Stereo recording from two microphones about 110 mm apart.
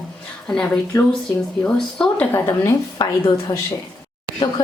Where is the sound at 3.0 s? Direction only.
45° left (ahead or behind).